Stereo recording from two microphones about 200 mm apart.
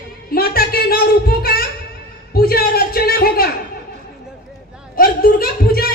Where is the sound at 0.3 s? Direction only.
50° left (ahead or behind).